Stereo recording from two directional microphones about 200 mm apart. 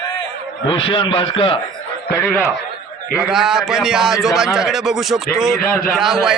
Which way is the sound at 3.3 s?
Centre (ahead or behind).